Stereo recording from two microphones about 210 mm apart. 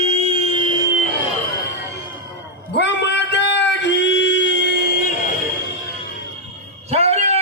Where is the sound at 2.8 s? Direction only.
55° left (ahead or behind).